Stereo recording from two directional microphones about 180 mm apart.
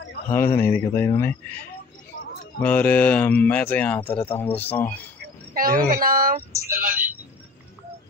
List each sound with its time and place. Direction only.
0.3 s speech: 10° left (ahead or behind)
2.6 s speech: 10° left (ahead or behind)
5.5 s speech: 55° right (ahead or behind)